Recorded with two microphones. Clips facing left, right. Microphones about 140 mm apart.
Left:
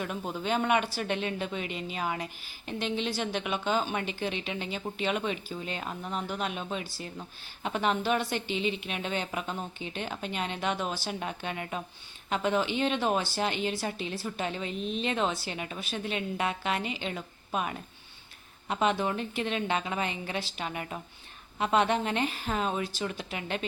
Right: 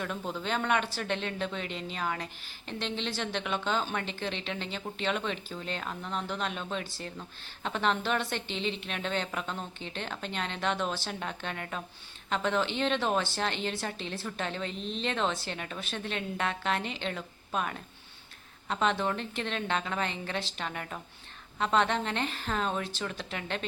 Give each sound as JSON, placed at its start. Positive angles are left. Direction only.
{"t": 0.0, "sound": "a woman's voice", "side_deg": 10}